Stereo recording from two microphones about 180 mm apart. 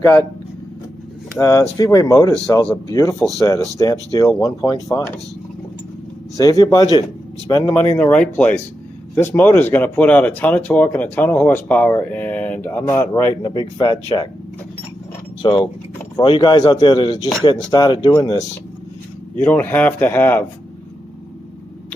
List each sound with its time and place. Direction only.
0.0 s speech: 15° left (ahead or behind)
1.4 s speech: 15° left (ahead or behind)
6.3 s speech: 20° left (ahead or behind)
7.7 s speech: 10° left (ahead or behind)
13.4 s speech: 25° left (ahead or behind)
15.4 s speech: 25° left (ahead or behind)
19.4 s speech: 10° left (ahead or behind)